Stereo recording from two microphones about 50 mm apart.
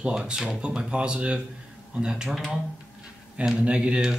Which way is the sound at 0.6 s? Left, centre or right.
Right.